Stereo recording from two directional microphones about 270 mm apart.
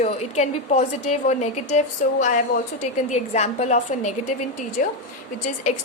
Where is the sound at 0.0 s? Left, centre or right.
Left.